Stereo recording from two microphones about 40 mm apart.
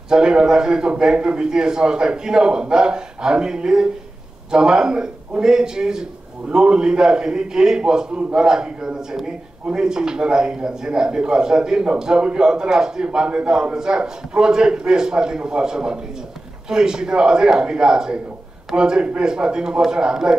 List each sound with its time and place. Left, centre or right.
0.1 s a man's voice: centre